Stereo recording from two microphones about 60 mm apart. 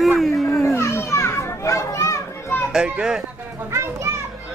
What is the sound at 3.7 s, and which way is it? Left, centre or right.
Speech, right.